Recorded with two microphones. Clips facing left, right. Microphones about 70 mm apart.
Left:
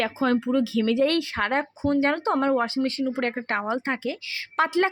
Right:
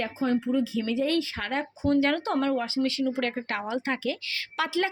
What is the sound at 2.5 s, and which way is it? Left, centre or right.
Speech, left.